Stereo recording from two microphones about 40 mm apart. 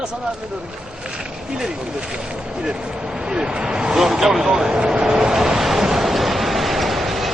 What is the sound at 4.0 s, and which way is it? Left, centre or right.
Vehicle, centre.